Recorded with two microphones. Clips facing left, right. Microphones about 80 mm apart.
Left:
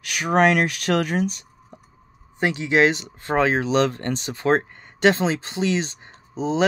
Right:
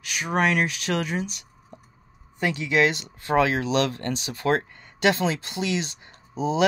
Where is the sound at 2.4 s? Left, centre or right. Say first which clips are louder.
Left 3 dB; left.